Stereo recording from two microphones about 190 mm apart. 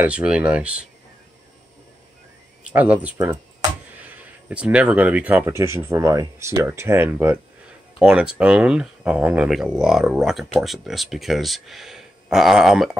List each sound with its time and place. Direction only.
0.0 s speech: 5° right (ahead or behind)
2.6 s speech: 5° right (ahead or behind)
4.5 s speech: 5° right (ahead or behind)